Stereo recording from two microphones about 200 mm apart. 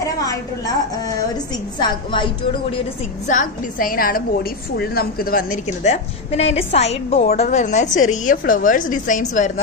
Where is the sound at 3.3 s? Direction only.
40° left (ahead or behind).